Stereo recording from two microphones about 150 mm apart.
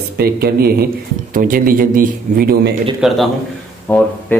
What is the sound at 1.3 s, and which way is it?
A man's voice, 70° right (ahead or behind).